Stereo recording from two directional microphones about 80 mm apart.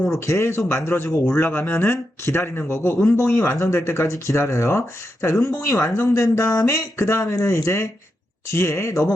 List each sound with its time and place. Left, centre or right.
0.3 s speech: left